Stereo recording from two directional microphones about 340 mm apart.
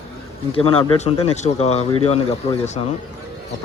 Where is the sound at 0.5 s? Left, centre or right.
Centre.